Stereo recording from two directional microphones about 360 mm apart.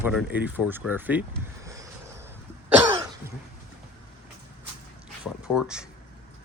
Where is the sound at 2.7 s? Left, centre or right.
Centre.